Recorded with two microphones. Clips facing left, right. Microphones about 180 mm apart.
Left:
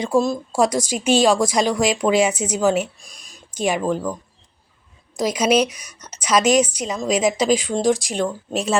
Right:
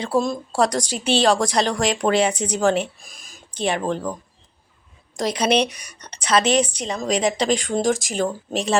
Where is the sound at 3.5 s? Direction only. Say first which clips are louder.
Left 2 dB; 10° left (ahead or behind).